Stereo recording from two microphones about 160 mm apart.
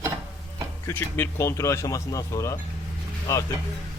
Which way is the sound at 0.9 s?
10° left (ahead or behind).